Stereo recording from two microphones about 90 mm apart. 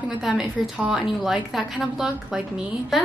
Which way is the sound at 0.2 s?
5° right (ahead or behind).